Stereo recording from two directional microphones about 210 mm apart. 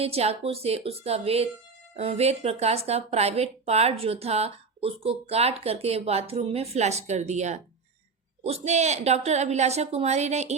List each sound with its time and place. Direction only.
0.0 s a woman's voice: 30° right (ahead or behind)